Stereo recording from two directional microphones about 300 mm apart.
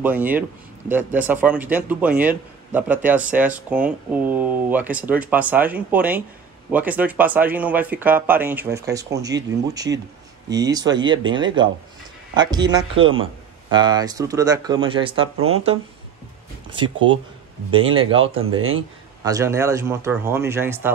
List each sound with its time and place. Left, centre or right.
0.0 s speech: centre
15.3 s speech: right
16.7 s speech: centre
18.4 s speech: right
19.2 s speech: centre